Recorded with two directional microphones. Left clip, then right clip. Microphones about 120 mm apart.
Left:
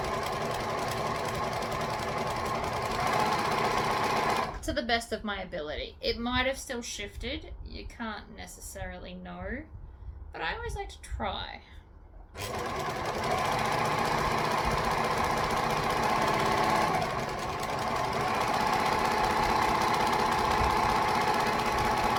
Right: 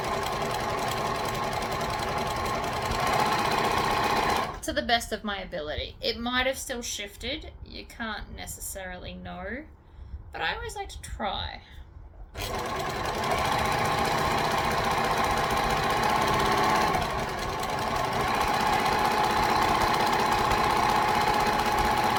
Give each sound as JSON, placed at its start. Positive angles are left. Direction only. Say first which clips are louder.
{"t": 0.1, "sound": "sewing machine", "louder": "right 3 dB", "side_deg": -10}
{"t": 4.6, "sound": "a woman's voice", "louder": "right 3 dB", "side_deg": -40}
{"t": 12.4, "sound": "sewing machine", "louder": "right 3 dB", "side_deg": -10}
{"t": 17.7, "sound": "engine", "louder": "right 2 dB", "side_deg": -5}